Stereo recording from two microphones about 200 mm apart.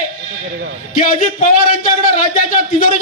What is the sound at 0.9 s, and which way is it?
Speech, 45° left (ahead or behind).